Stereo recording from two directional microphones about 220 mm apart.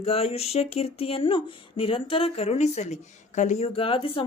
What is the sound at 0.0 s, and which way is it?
Speech, 25° left (ahead or behind).